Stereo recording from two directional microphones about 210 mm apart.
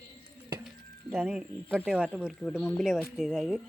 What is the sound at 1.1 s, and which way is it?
Speech, 5° right (ahead or behind).